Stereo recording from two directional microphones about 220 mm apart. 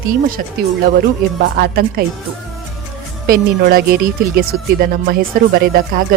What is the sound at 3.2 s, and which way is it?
Speech, 40° right (ahead or behind).